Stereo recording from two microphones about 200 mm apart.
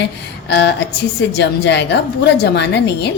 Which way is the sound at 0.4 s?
55° left (ahead or behind).